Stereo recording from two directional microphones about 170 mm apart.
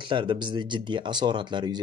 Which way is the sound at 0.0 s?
30° right (ahead or behind).